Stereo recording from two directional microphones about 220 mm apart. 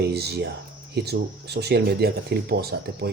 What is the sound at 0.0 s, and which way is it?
Speech, 50° right (ahead or behind).